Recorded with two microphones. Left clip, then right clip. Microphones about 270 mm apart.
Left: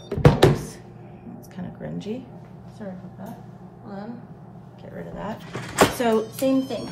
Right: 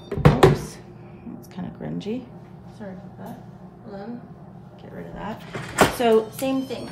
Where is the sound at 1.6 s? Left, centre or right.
Centre.